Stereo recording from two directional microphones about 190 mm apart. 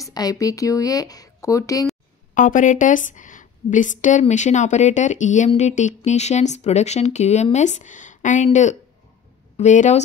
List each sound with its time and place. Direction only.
0.0 s speech: 20° left (ahead or behind)
2.3 s speech: 45° left (ahead or behind)